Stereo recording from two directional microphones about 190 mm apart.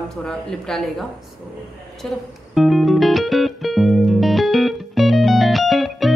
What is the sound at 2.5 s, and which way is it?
Music, centre (ahead or behind).